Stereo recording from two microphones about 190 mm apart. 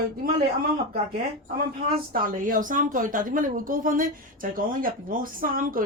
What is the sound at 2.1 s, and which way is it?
Speech, 45° right (ahead or behind).